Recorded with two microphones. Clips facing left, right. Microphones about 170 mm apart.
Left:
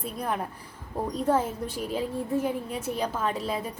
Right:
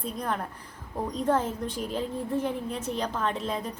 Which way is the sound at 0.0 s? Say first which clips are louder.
Left 1 dB; 10° left (ahead or behind).